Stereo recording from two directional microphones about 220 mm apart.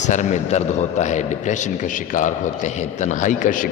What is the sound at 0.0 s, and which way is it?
A man's voice, 35° left (ahead or behind).